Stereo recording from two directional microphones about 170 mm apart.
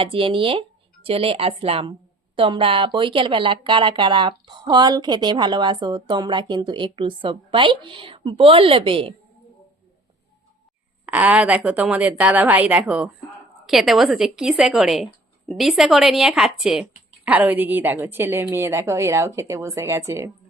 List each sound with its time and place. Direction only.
0.0 s a woman's voice: 30° right (ahead or behind)
11.0 s a woman's voice: 10° right (ahead or behind)